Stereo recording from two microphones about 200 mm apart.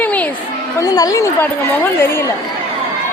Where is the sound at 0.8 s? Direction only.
20° left (ahead or behind).